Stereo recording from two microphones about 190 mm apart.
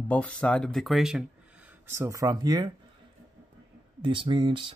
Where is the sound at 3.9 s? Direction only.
25° right (ahead or behind).